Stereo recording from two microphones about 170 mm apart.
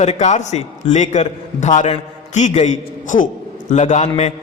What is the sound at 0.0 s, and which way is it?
A man's voice, 40° left (ahead or behind).